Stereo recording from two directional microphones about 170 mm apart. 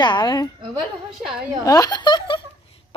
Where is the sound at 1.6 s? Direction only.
20° left (ahead or behind).